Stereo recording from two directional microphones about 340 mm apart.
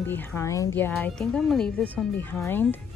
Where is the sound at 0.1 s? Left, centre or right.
Centre.